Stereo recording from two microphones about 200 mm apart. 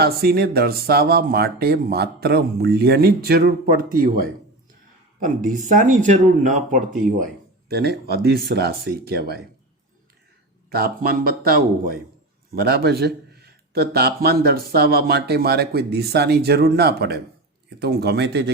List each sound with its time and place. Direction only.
0.0 s speech: 50° right (ahead or behind)
5.2 s speech: 40° right (ahead or behind)
7.7 s speech: 55° right (ahead or behind)
10.7 s speech: 50° right (ahead or behind)